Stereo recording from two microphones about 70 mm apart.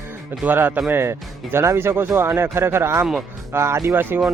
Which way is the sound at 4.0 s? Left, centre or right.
Right.